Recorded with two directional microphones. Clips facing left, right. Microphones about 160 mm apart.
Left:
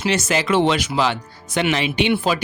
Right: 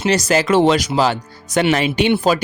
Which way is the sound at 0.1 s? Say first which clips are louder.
Right 5 dB; 40° right (ahead or behind).